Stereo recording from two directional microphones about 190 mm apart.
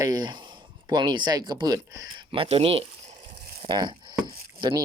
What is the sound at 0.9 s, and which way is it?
Speech, 25° right (ahead or behind).